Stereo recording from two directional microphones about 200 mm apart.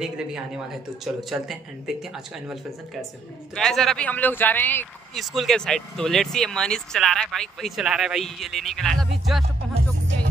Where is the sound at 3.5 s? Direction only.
Centre (ahead or behind).